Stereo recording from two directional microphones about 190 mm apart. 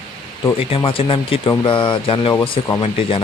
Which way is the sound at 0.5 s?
30° left (ahead or behind).